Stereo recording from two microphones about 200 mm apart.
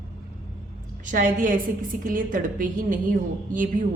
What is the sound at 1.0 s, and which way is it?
A woman's voice, 40° right (ahead or behind).